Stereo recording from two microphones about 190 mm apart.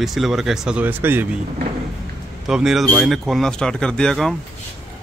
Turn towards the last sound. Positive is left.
turn(degrees=5)  # may be behind; listen again after turning